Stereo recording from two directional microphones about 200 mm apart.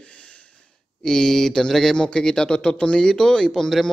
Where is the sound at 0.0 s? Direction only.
5° left (ahead or behind).